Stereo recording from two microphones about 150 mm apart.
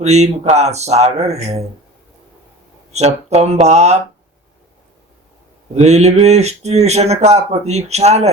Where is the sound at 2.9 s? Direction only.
50° right (ahead or behind).